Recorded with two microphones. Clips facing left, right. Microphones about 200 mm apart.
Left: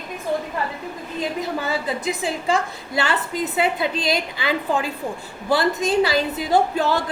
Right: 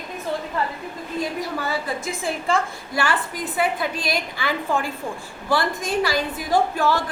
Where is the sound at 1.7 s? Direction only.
20° left (ahead or behind).